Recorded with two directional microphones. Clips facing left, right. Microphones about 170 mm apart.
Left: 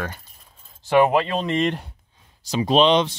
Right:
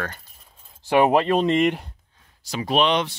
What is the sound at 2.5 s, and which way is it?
Speech, 20° left (ahead or behind).